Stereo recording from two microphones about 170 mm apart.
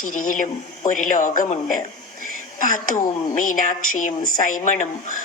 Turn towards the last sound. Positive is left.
turn(degrees=50)  # may be behind; listen again after turning